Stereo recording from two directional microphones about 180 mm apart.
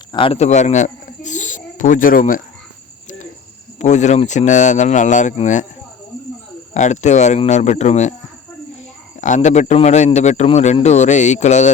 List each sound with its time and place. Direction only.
0.1 s speech: 30° left (ahead or behind); by 2.4 s 50° left (ahead or behind)
3.8 s speech: 40° left (ahead or behind)
6.7 s speech: 40° left (ahead or behind)
9.2 s speech: 40° left (ahead or behind)